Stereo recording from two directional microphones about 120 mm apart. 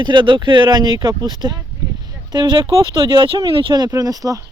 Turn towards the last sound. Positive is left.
turn(degrees=-30)  # may be behind; listen again after turning